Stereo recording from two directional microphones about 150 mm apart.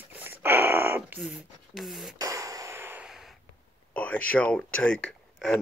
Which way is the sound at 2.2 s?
20° right (ahead or behind).